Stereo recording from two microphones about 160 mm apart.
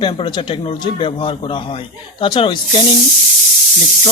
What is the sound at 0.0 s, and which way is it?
Speech, 30° left (ahead or behind).